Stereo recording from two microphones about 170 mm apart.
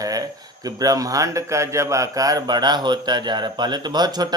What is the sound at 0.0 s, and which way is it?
Speech, 20° right (ahead or behind).